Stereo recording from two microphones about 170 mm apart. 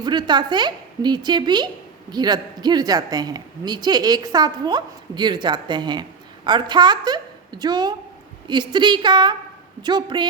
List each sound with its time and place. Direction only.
0.0 s a woman's voice: 25° right (ahead or behind)